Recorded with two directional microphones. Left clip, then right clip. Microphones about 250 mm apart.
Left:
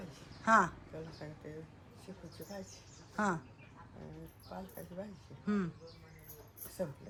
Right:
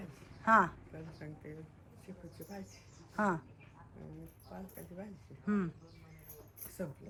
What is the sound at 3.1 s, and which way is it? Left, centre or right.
Speech, centre.